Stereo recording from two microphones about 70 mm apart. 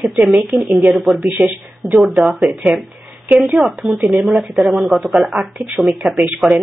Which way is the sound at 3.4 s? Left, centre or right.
Centre.